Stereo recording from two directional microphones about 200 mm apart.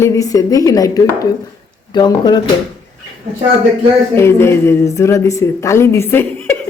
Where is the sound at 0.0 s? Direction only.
15° left (ahead or behind).